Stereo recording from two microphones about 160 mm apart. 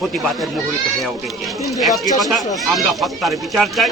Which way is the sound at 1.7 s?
Centre (ahead or behind).